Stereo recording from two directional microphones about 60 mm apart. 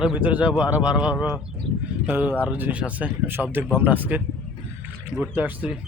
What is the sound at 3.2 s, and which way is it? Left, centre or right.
Speech, right.